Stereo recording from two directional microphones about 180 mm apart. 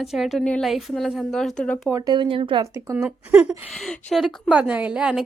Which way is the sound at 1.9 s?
20° right (ahead or behind).